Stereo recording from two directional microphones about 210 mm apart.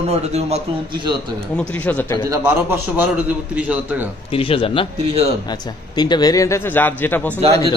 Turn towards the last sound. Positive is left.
turn(degrees=-30)  # may be behind; listen again after turning